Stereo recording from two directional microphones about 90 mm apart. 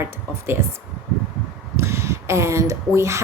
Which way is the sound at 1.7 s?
30° right (ahead or behind).